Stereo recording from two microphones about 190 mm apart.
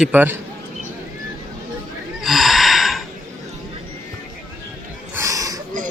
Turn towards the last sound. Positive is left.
turn(degrees=-20)  # may be behind; listen again after turning